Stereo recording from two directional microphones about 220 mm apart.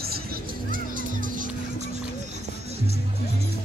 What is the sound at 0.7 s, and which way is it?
Music, 40° right (ahead or behind).